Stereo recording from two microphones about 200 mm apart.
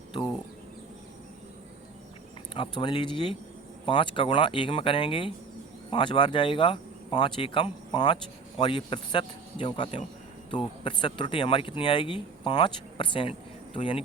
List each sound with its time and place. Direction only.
2.6 s speech: 25° left (ahead or behind)